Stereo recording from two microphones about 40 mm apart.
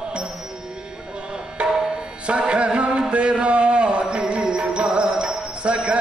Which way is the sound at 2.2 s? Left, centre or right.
Right.